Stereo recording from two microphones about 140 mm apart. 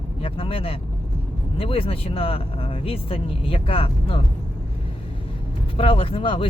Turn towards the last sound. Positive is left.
turn(degrees=40)  # may be behind; listen again after turning